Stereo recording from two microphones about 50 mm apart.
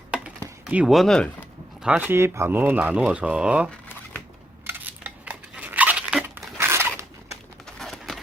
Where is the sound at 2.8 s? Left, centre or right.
Right.